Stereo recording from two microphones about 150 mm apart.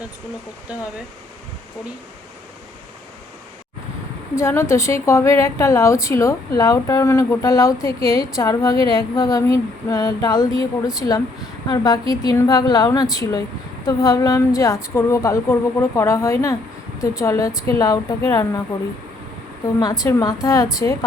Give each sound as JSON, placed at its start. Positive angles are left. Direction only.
{"t": 0.7, "sound": "speech", "side_deg": -5}
{"t": 4.4, "sound": "a woman's voice", "side_deg": 20}
{"t": 19.8, "sound": "a woman's voice", "side_deg": 25}